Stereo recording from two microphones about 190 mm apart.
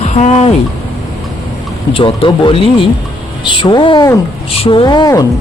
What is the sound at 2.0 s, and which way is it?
Speech, 25° left (ahead or behind).